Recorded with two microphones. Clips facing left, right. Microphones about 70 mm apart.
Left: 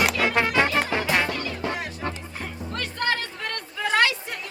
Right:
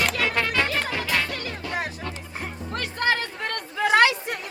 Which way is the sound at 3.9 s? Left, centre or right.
Centre.